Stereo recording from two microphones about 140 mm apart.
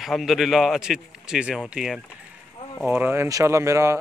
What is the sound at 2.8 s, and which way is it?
Speech, 10° right (ahead or behind).